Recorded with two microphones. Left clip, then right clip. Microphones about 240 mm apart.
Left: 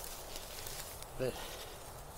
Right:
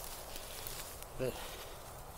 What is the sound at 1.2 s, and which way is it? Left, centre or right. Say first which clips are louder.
Speech: left 1 dB; centre.